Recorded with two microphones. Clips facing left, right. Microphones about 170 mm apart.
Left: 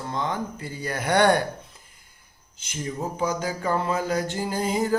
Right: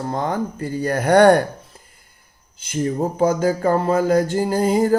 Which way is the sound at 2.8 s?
50° right (ahead or behind).